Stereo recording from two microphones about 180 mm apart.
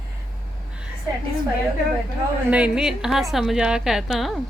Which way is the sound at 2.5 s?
5° right (ahead or behind).